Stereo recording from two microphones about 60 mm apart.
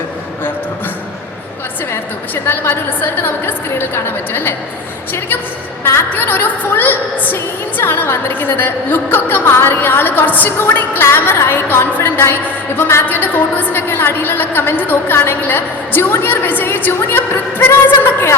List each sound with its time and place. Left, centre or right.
2.3 s a woman's voice: left
5.8 s a woman's voice: left
11.0 s a woman's voice: left